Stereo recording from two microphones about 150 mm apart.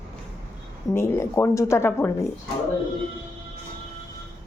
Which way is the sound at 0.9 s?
20° left (ahead or behind).